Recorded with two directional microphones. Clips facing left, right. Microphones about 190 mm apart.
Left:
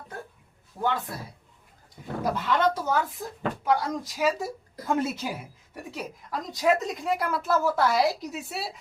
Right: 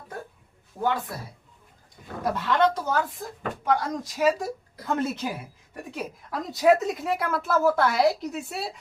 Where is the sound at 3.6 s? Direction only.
5° left (ahead or behind).